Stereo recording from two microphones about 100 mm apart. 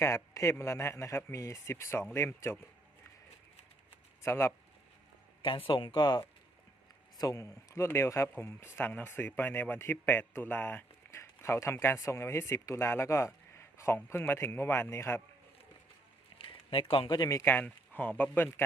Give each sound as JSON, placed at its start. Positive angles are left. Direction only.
{"t": 0.0, "sound": "a man's voice", "side_deg": 30}
{"t": 4.2, "sound": "speech", "side_deg": 25}
{"t": 5.4, "sound": "speech", "side_deg": 60}
{"t": 7.2, "sound": "speech", "side_deg": 35}
{"t": 16.4, "sound": "a sound", "side_deg": 60}
{"t": 17.2, "sound": "a man's voice", "side_deg": 35}
{"t": 17.4, "sound": "speech", "side_deg": 20}